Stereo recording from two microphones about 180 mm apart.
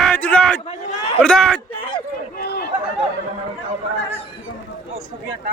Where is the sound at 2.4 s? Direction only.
60° left (ahead or behind).